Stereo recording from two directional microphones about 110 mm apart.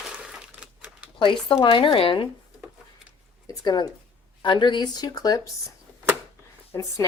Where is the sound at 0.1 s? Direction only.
10° right (ahead or behind).